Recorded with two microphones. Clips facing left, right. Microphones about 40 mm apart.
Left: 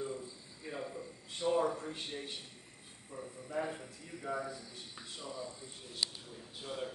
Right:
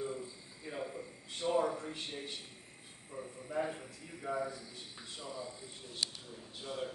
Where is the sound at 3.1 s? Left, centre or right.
Right.